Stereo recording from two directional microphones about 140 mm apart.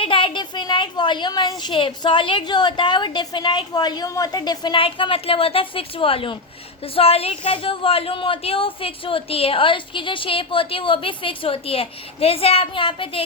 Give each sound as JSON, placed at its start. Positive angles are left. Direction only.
{"t": 0.0, "sound": "a woman's voice", "side_deg": 40}